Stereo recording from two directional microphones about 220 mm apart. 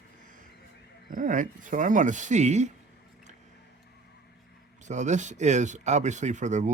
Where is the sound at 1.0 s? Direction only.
40° right (ahead or behind).